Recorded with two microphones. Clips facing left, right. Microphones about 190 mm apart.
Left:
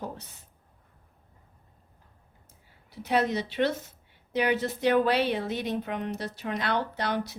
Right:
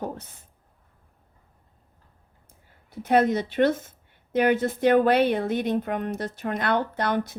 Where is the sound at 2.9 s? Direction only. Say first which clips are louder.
Right 6 dB; 50° right (ahead or behind).